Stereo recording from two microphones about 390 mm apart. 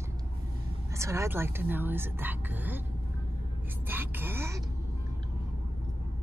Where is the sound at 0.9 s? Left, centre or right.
Centre.